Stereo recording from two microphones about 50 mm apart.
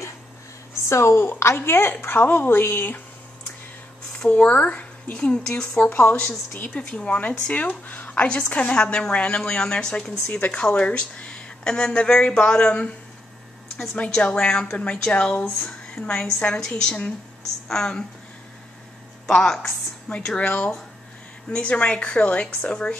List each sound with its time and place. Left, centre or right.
0.8 s a woman's voice: left
4.3 s a woman's voice: left
5.9 s a woman's voice: left
14.1 s a woman's voice: centre
19.2 s a woman's voice: centre
20.3 s a woman's voice: left